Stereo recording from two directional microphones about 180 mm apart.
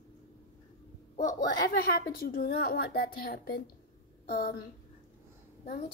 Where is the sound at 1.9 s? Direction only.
60° left (ahead or behind).